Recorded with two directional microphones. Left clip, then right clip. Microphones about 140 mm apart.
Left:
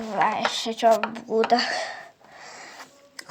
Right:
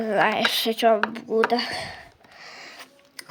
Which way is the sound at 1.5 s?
10° right (ahead or behind).